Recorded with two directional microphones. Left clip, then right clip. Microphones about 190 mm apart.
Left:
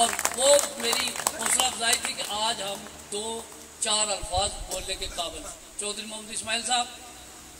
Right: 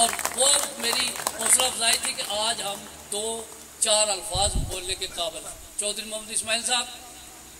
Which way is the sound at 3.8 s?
50° right (ahead or behind).